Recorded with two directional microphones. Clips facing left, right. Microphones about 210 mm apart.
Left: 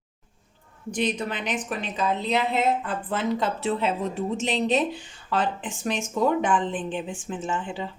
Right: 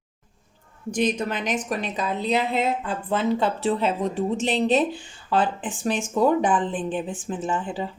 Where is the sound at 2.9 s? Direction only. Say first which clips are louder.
Right 3 dB; 30° right (ahead or behind).